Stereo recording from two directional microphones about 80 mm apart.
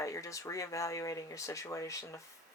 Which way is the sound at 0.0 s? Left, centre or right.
Left.